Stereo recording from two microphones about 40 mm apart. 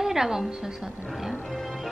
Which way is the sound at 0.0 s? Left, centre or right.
Centre.